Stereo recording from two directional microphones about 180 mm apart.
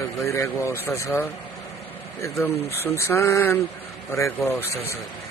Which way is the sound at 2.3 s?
15° left (ahead or behind).